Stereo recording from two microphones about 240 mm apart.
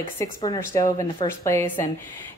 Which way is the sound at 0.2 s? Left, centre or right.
Centre.